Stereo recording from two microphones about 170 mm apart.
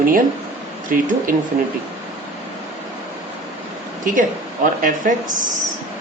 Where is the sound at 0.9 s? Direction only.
50° right (ahead or behind).